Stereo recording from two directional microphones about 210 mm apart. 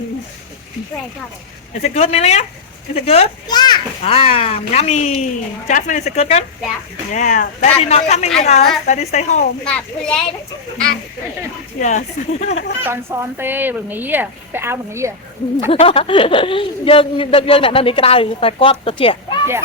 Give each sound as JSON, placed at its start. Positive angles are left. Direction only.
{"t": 1.8, "sound": "speech", "side_deg": 30}
{"t": 9.6, "sound": "speech", "side_deg": 5}
{"t": 11.8, "sound": "speech", "side_deg": 35}
{"t": 12.8, "sound": "a woman's voice", "side_deg": -10}
{"t": 15.6, "sound": "speech", "side_deg": 25}